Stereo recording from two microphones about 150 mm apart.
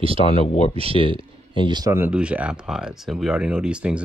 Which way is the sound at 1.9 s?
10° right (ahead or behind).